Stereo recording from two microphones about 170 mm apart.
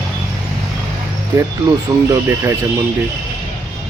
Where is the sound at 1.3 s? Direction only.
20° right (ahead or behind).